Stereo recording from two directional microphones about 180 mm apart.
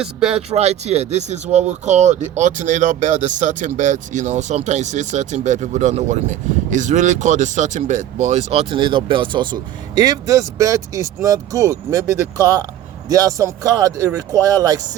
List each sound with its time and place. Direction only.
0.0 s speech: 5° right (ahead or behind)
0.5 s speech: 35° right (ahead or behind); by 14.8 s 20° right (ahead or behind)